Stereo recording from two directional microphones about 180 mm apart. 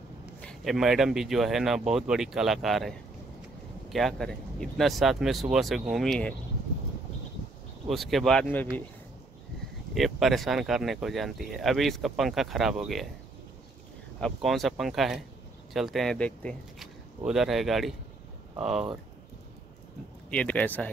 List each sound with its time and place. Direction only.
0.4 s speech: centre (ahead or behind)
7.9 s speech: centre (ahead or behind)
9.9 s speech: centre (ahead or behind)
14.2 s speech: centre (ahead or behind)
20.2 s speech: 10° left (ahead or behind)